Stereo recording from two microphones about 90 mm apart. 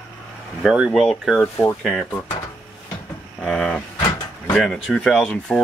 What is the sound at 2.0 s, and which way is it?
Speech, 20° left (ahead or behind).